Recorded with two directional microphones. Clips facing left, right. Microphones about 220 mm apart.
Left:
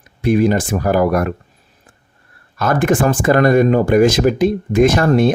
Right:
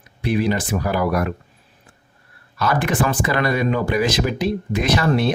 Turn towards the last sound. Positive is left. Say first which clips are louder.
# left 6 dB
turn(degrees=45)  # may be behind; listen again after turning